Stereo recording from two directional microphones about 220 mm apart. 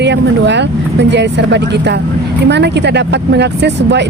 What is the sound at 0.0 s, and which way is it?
Vehicle, 50° right (ahead or behind).